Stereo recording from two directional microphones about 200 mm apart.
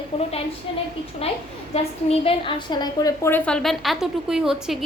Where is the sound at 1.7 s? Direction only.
30° left (ahead or behind).